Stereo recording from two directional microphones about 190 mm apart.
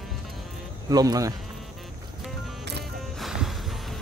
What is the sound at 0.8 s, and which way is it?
Speech, 20° right (ahead or behind).